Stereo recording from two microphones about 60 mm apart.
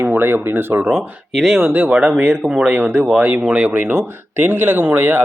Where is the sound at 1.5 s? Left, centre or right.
Right.